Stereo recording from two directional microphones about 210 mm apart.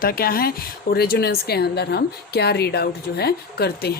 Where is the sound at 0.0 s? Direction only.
45° left (ahead or behind).